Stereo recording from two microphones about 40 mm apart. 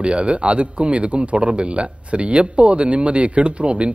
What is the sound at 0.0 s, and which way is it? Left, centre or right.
A man's voice, right.